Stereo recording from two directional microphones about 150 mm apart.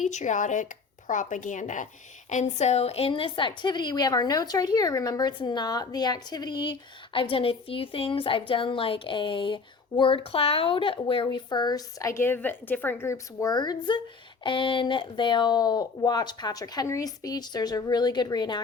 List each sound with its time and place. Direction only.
0.0 s a woman's voice: 55° left (ahead or behind); by 18.6 s 30° left (ahead or behind)